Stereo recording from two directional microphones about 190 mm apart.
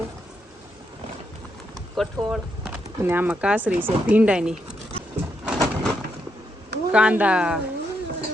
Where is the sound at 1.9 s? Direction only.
Centre (ahead or behind).